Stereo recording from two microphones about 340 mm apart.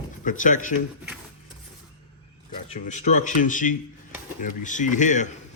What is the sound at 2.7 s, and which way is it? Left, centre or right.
Speech, left.